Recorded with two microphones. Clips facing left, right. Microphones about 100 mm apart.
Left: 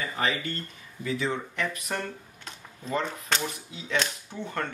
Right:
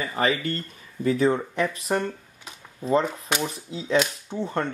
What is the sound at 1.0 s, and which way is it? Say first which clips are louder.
Speech: right 8 dB; 40° right (ahead or behind).